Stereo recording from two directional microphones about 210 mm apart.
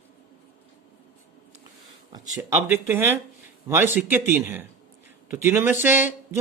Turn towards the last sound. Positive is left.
turn(degrees=-10)  # may be behind; listen again after turning